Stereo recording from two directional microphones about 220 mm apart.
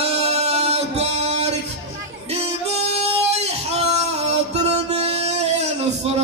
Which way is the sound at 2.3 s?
30° right (ahead or behind).